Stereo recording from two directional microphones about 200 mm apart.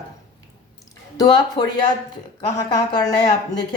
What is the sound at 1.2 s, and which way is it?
Speech, 20° left (ahead or behind).